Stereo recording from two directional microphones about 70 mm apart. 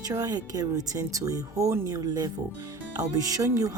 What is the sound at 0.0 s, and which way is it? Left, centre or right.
Speech, right.